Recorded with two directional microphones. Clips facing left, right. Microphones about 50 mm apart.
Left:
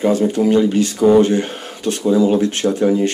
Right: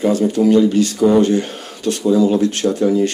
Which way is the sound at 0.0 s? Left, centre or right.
Left.